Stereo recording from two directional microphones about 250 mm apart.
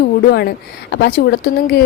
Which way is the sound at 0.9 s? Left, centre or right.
Left.